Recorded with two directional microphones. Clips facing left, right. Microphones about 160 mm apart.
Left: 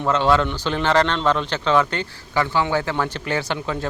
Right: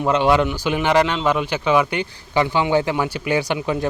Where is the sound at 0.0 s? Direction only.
15° right (ahead or behind).